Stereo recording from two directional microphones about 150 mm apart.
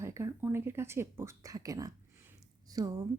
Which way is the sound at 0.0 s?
20° right (ahead or behind).